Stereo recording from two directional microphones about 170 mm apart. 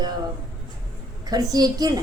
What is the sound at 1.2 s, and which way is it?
Speech, 20° right (ahead or behind).